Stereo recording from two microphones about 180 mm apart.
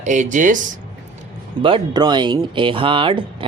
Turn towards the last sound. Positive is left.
turn(degrees=-30)  # may be behind; listen again after turning